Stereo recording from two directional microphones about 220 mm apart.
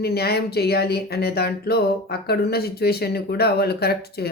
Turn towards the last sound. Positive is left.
turn(degrees=45)  # may be behind; listen again after turning